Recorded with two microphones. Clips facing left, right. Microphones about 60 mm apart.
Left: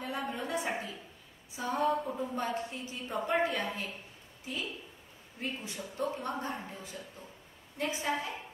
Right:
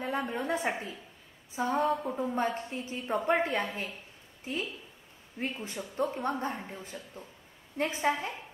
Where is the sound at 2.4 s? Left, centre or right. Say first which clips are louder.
Right 3 dB; right.